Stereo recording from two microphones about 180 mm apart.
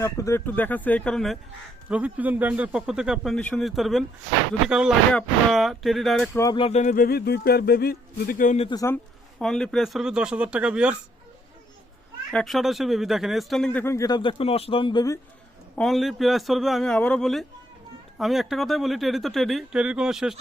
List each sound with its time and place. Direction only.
0.0 s speech: 15° left (ahead or behind)
6.6 s speech: 35° left (ahead or behind)
8.6 s a man's voice: 20° left (ahead or behind)
9.4 s speech: centre (ahead or behind)
12.3 s speech: 5° left (ahead or behind); by 15.2 s 20° left (ahead or behind)
15.7 s speech: centre (ahead or behind)